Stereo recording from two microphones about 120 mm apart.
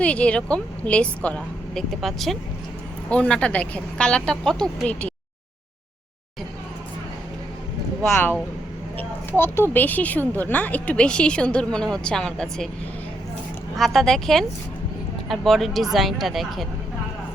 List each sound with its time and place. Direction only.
0.0 s a woman's voice: 10° left (ahead or behind)
8.1 s a woman's voice: 15° left (ahead or behind)
13.7 s a woman's voice: centre (ahead or behind)